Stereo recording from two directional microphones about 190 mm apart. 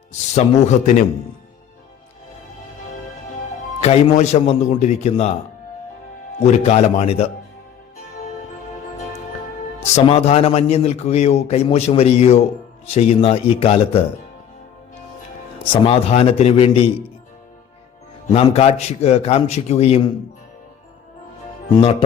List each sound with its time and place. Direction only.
0.3 s a man's voice: 40° left (ahead or behind)
3.8 s a man's voice: 35° left (ahead or behind)
6.4 s a man's voice: 35° left (ahead or behind)
9.9 s a man's voice: 35° left (ahead or behind)
15.6 s a man's voice: 30° left (ahead or behind)
18.3 s a man's voice: 30° left (ahead or behind)